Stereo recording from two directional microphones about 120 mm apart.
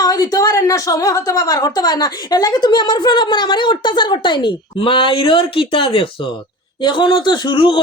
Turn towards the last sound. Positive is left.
turn(degrees=45)  # may be behind; listen again after turning